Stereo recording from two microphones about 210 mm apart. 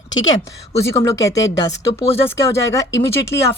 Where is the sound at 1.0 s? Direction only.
15° left (ahead or behind).